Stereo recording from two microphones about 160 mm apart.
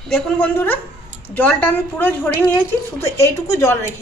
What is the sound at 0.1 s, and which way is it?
A woman's voice, 10° left (ahead or behind).